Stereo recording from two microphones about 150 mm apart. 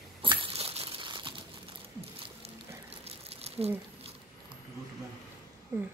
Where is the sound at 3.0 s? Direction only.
45° right (ahead or behind).